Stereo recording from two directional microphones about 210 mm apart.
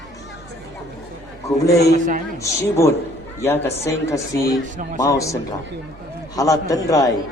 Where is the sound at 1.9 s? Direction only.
35° right (ahead or behind).